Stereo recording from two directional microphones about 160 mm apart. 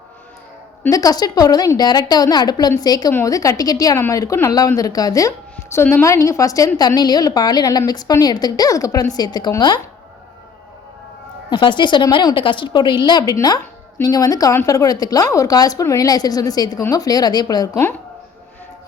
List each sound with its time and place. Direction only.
0.8 s a woman's voice: 20° left (ahead or behind)
11.4 s a woman's voice: 30° left (ahead or behind)